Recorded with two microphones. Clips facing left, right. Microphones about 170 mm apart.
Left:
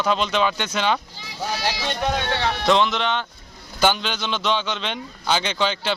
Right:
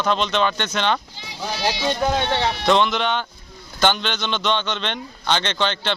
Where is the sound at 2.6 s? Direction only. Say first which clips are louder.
Even; centre (ahead or behind).